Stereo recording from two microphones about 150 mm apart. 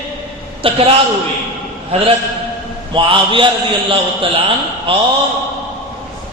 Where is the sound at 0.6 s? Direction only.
40° right (ahead or behind).